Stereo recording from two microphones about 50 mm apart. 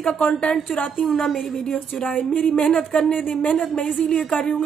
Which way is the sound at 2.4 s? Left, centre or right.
Centre.